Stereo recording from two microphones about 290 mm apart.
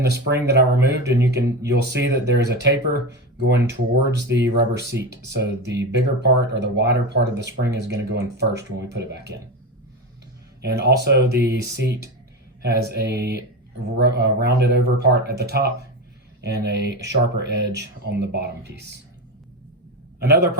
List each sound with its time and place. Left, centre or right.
0.0 s speech: right
10.6 s speech: right
20.1 s a man's voice: right